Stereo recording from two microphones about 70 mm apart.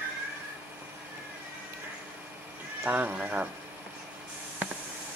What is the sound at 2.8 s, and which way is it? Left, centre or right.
Speech, right.